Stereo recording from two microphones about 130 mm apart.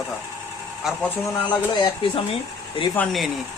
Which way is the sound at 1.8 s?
45° left (ahead or behind).